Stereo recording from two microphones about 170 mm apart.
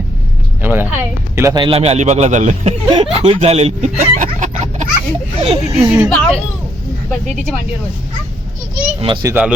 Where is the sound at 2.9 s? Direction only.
30° right (ahead or behind).